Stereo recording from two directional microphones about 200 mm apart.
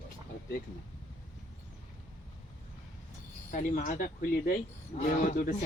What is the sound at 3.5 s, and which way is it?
A man's voice, 40° left (ahead or behind).